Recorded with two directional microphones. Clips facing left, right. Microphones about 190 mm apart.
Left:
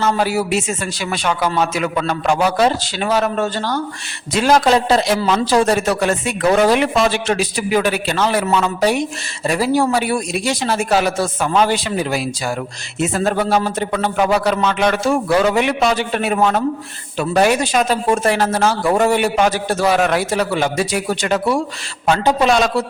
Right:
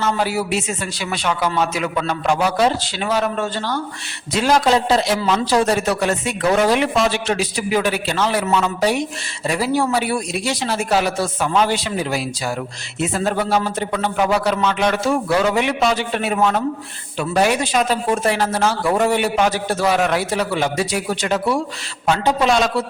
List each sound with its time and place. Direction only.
0.0 s a man's voice: 45° left (ahead or behind)
4.4 s a man's voice: 55° left (ahead or behind)